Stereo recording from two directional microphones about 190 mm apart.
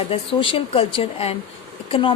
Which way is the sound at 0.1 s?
30° left (ahead or behind).